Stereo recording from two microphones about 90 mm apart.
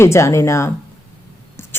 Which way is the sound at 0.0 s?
30° left (ahead or behind).